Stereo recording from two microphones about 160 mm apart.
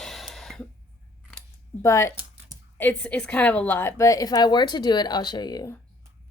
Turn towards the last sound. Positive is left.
turn(degrees=25)  # may be behind; listen again after turning